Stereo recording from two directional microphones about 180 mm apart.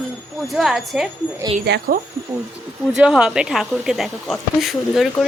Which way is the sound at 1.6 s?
65° right (ahead or behind).